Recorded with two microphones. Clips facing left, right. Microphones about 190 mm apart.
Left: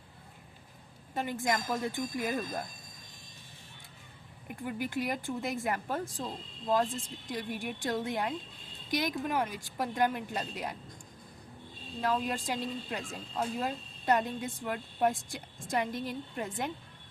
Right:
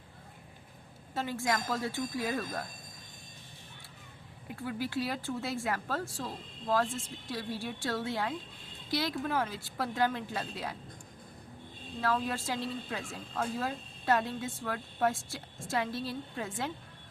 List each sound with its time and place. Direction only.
1.1 s speech: 15° left (ahead or behind)
4.5 s speech: 15° left (ahead or behind)
11.9 s speech: 15° left (ahead or behind)